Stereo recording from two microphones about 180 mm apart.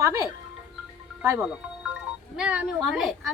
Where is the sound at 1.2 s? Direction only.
10° right (ahead or behind).